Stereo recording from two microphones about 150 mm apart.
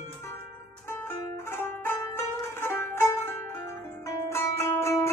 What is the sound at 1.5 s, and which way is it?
Music, 15° left (ahead or behind).